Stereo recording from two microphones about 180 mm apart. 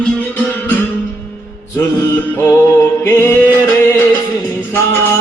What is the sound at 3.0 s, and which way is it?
Music, 15° left (ahead or behind).